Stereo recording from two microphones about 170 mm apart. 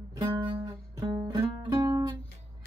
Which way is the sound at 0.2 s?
25° right (ahead or behind).